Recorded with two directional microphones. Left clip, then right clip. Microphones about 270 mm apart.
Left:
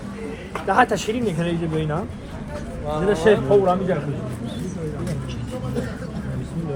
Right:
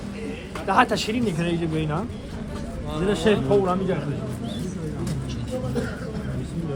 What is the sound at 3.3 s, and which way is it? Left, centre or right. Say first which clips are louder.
Speech: left 4 dB; centre.